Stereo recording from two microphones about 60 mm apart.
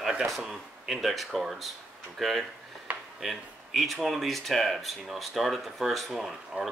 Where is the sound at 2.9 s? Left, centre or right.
Right.